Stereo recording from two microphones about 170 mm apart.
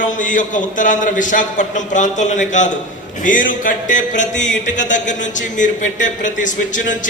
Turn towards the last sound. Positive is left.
turn(degrees=50)  # may be behind; listen again after turning